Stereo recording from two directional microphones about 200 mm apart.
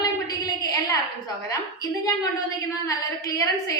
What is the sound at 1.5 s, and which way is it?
A woman's voice, 20° left (ahead or behind).